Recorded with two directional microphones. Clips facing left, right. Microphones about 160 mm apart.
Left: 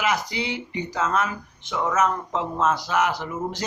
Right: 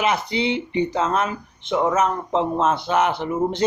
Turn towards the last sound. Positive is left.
turn(degrees=-25)  # may be behind; listen again after turning